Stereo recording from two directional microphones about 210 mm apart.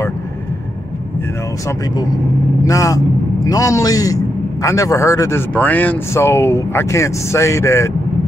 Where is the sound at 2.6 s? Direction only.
15° left (ahead or behind).